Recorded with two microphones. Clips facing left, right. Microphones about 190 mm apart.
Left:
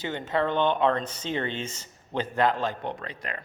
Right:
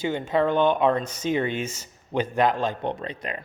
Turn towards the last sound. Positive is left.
turn(degrees=-20)  # may be behind; listen again after turning